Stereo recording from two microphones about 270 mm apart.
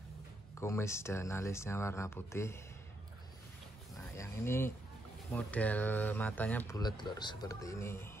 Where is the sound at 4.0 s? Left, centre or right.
Centre.